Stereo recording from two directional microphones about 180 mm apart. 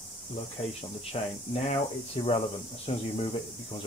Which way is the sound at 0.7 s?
35° left (ahead or behind).